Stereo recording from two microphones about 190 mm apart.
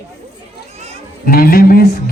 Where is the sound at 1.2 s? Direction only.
50° left (ahead or behind).